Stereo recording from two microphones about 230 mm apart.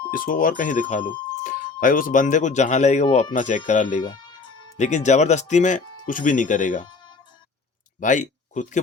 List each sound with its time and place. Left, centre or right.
0.1 s speech: left
7.9 s speech: left